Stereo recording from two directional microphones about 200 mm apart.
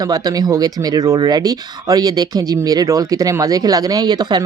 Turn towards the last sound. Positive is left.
turn(degrees=-20)  # may be behind; listen again after turning